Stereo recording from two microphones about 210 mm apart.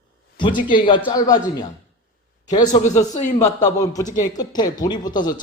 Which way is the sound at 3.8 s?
15° left (ahead or behind).